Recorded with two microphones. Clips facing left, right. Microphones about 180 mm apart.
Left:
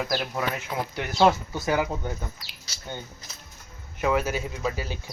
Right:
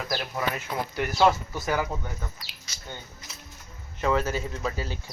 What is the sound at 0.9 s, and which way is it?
Speech, 20° left (ahead or behind).